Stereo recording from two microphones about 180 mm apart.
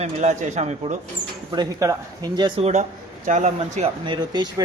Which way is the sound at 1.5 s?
20° right (ahead or behind).